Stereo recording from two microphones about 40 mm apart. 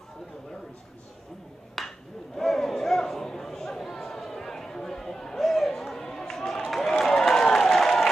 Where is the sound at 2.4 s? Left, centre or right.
Centre.